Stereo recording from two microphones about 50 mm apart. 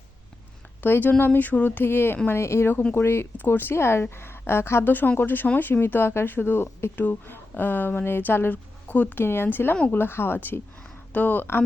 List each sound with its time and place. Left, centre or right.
0.8 s speech: left
3.3 s a woman's voice: left
4.9 s a woman's voice: left
6.9 s speech: left
8.9 s speech: left
9.1 s a woman's voice: left